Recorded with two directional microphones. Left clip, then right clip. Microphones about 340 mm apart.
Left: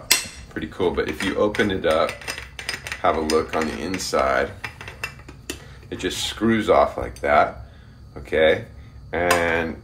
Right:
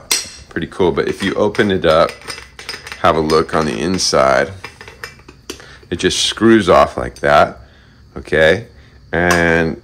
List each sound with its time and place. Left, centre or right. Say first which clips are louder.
0.6 s speech: right 7 dB; right
5.9 s speech: right 10 dB; right